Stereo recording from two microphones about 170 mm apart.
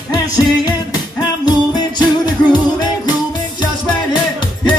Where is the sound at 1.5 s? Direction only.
25° left (ahead or behind).